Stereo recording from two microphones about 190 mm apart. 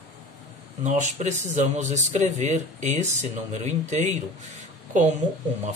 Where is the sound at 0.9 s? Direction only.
40° right (ahead or behind).